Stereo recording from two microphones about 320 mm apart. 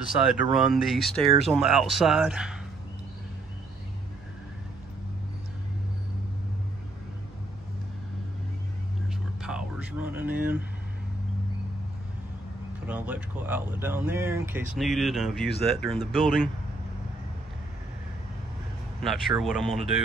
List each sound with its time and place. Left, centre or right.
0.0 s speech: centre
9.4 s a sound: centre
10.3 s vehicle: right
12.8 s speech: centre
19.0 s speech: centre